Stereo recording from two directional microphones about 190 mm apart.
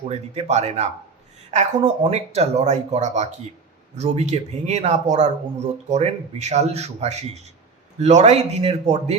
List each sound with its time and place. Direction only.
0.1 s speech: 35° right (ahead or behind)